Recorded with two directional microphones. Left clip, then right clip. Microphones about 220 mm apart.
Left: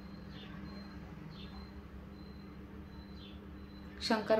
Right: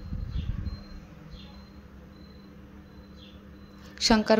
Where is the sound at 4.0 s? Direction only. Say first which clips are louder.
Right 9 dB; 45° right (ahead or behind).